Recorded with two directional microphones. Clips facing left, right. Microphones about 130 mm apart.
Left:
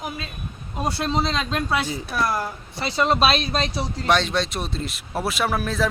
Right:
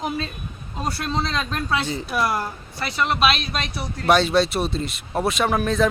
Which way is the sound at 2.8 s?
30° left (ahead or behind).